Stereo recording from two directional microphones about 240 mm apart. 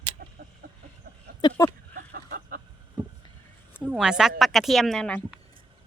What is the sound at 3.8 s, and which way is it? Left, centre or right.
Speech, centre.